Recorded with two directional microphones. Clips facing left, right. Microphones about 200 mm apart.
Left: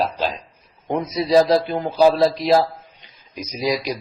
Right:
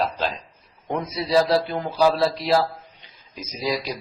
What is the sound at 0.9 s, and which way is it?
A man's voice, 20° left (ahead or behind).